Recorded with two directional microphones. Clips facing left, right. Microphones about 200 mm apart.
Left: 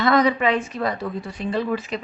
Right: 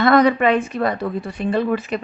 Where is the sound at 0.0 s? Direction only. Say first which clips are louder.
Right 4 dB; 60° right (ahead or behind).